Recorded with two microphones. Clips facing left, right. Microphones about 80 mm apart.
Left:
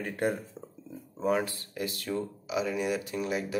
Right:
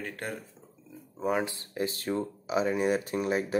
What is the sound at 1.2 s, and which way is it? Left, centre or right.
Speech, right.